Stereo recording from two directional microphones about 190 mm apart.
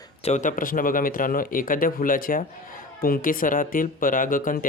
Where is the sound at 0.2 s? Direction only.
35° left (ahead or behind).